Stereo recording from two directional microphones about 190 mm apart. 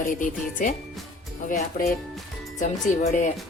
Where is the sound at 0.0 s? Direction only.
45° left (ahead or behind).